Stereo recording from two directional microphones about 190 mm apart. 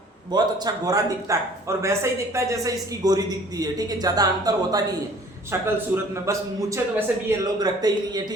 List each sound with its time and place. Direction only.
0.3 s a man's voice: 20° right (ahead or behind)